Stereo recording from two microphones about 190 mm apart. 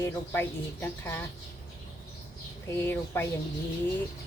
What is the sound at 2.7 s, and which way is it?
Speech, 10° left (ahead or behind).